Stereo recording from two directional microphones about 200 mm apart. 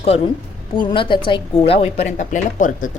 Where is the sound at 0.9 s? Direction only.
25° left (ahead or behind).